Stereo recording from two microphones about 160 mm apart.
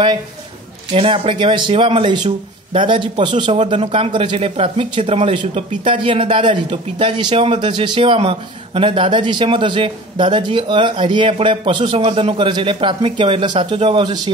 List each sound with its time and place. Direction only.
0.9 s speech: 35° right (ahead or behind)